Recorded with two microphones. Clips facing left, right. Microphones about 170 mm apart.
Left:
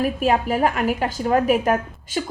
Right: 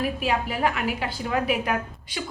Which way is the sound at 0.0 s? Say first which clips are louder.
Left 6 dB; 45° left (ahead or behind).